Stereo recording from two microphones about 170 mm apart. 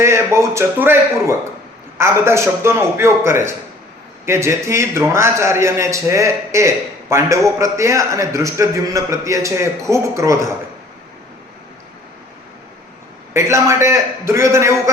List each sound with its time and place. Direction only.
0.0 s a man's voice: 15° right (ahead or behind)
13.3 s a man's voice: 15° right (ahead or behind)